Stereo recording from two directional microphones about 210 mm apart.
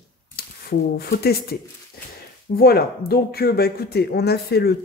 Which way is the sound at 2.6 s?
45° left (ahead or behind).